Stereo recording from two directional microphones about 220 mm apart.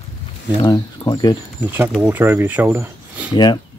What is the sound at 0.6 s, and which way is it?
Speech, 15° left (ahead or behind).